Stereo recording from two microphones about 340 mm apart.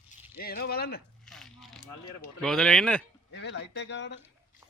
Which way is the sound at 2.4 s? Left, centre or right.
Centre.